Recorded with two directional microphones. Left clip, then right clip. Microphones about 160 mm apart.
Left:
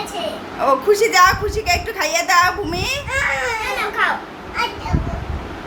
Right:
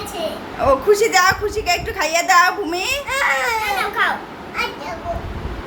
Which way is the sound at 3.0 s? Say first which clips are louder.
Right 2 dB; 50° right (ahead or behind).